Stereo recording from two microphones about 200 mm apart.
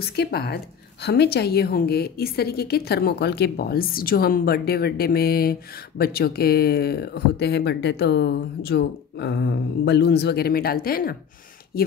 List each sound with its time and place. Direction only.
0.0 s a woman's voice: 55° left (ahead or behind)